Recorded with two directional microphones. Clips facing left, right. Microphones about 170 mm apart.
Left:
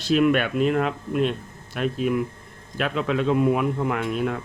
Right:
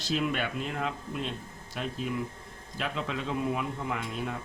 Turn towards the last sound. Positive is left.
turn(degrees=65)  # may be behind; listen again after turning